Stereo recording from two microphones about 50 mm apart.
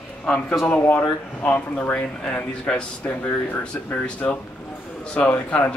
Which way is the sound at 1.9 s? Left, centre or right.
Left.